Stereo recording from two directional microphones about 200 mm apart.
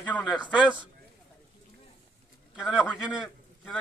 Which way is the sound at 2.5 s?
Centre (ahead or behind).